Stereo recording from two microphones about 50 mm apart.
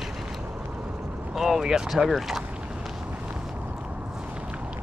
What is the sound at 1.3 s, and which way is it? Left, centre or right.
Speech, centre.